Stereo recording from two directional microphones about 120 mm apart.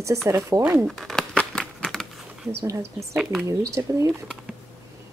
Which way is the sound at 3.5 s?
25° right (ahead or behind).